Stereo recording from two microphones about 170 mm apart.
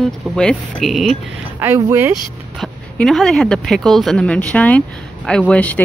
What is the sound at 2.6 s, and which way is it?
A woman's voice, centre (ahead or behind).